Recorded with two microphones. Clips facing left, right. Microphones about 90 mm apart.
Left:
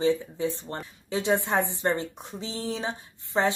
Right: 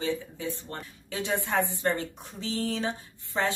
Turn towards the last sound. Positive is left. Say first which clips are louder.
# left 4 dB
turn(degrees=20)  # may be behind; listen again after turning